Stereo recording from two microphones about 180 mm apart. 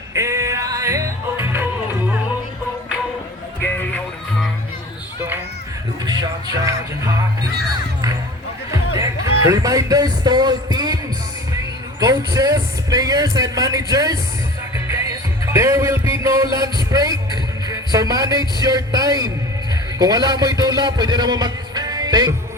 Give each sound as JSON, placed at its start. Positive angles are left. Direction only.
{"t": 0.1, "sound": "music", "side_deg": -15}
{"t": 3.6, "sound": "music", "side_deg": 10}
{"t": 6.1, "sound": "music", "side_deg": -20}
{"t": 9.0, "sound": "music", "side_deg": -20}
{"t": 11.9, "sound": "a sound", "side_deg": -20}
{"t": 15.4, "sound": "music", "side_deg": -15}
{"t": 18.6, "sound": "a man's voice", "side_deg": -20}